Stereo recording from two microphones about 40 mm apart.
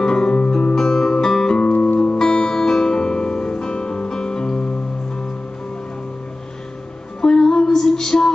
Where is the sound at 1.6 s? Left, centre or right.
Left.